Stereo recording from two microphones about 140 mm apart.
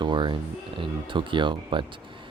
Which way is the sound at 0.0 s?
35° right (ahead or behind).